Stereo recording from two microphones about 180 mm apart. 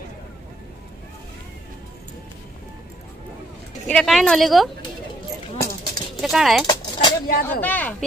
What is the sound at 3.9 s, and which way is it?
Speech, centre (ahead or behind).